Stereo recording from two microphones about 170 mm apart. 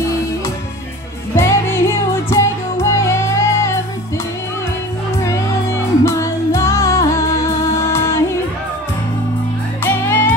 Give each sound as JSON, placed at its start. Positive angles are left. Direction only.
{"t": 1.3, "sound": "music", "side_deg": 15}
{"t": 5.2, "sound": "music", "side_deg": 15}
{"t": 9.8, "sound": "music", "side_deg": 15}